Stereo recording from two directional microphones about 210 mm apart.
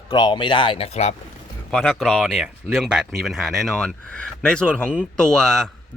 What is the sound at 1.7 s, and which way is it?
A man's voice, centre (ahead or behind).